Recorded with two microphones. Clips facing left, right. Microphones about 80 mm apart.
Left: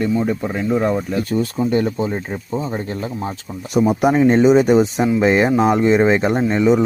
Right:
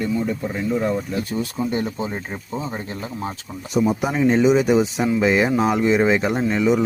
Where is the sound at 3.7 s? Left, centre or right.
Left.